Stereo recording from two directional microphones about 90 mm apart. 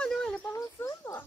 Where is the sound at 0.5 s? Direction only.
30° left (ahead or behind).